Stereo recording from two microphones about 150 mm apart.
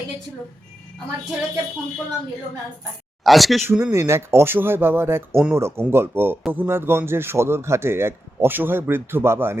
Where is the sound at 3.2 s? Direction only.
Centre (ahead or behind).